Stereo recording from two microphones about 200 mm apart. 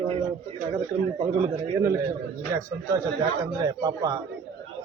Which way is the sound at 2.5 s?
15° right (ahead or behind).